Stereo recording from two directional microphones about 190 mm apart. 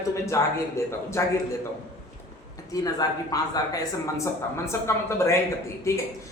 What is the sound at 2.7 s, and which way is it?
Speech, 20° left (ahead or behind).